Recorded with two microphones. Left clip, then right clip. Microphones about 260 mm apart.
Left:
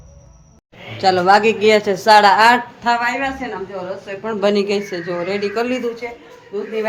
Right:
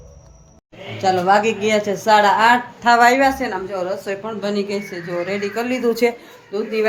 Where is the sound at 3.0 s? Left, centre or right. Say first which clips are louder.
Right 7 dB; right.